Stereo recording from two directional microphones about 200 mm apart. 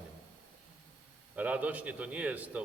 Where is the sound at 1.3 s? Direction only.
5° right (ahead or behind).